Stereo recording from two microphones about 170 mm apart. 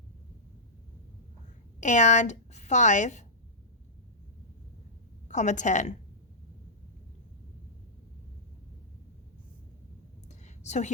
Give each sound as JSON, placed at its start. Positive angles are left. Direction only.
{"t": 1.8, "sound": "a woman's voice", "side_deg": 45}
{"t": 5.3, "sound": "a woman's voice", "side_deg": 45}
{"t": 10.2, "sound": "a sound", "side_deg": 40}